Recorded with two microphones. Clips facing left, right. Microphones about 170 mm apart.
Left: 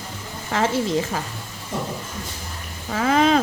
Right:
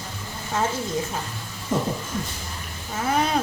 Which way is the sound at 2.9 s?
90° left.